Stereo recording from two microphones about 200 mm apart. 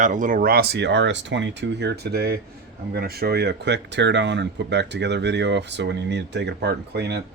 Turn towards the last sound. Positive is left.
turn(degrees=-55)  # may be behind; listen again after turning